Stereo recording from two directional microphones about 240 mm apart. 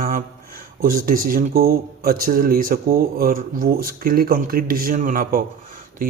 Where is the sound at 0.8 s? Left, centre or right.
Right.